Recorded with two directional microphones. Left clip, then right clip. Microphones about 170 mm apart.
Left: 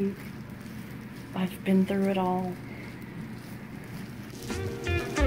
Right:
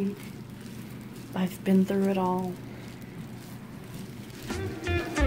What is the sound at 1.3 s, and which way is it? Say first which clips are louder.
A woman's voice: right 1 dB; 25° right (ahead or behind).